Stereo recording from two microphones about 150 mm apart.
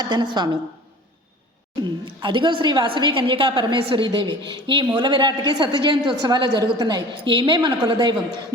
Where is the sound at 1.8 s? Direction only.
30° right (ahead or behind).